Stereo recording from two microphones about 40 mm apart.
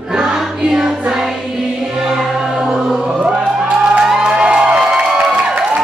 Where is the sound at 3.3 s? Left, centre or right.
Right.